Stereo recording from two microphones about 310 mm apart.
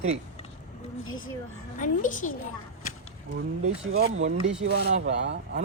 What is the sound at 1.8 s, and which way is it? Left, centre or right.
Speech, left.